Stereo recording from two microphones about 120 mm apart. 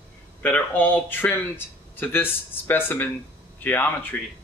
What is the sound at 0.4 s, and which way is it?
Speech, 15° left (ahead or behind).